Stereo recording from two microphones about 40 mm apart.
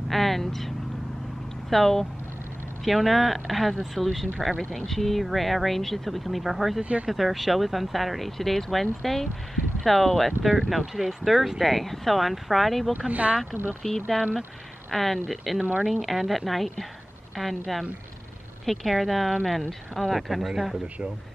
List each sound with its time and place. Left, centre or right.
0.1 s speech: centre
4.6 s speech: centre
6.8 s speech: right
7.1 s speech: centre
13.1 s speech: right
13.8 s speech: centre